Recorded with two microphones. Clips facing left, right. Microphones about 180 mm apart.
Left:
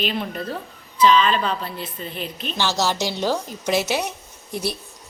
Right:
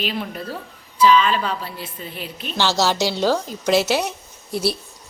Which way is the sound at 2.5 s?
15° left (ahead or behind).